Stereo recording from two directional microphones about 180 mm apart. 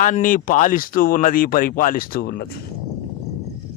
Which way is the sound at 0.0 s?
45° left (ahead or behind).